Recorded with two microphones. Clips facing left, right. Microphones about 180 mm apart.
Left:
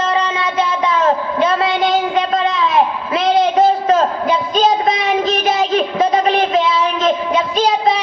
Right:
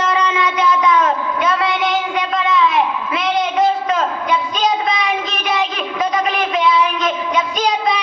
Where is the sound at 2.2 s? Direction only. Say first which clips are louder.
Left 1 dB; 35° left (ahead or behind).